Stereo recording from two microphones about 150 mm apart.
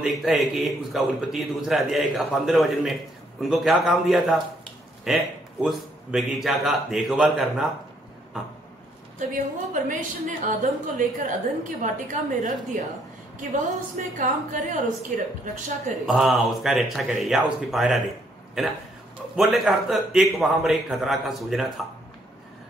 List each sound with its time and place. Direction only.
0.0 s a man's voice: centre (ahead or behind)
9.8 s a woman's voice: 60° right (ahead or behind)
16.1 s a man's voice: centre (ahead or behind)